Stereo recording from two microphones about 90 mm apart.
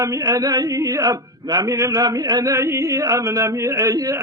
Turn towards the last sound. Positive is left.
turn(degrees=-40)  # may be behind; listen again after turning